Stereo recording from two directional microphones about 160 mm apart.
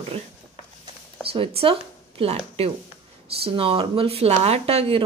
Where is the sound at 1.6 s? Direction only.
35° right (ahead or behind).